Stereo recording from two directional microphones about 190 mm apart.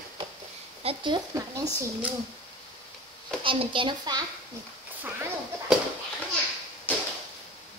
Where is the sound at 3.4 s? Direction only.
25° right (ahead or behind).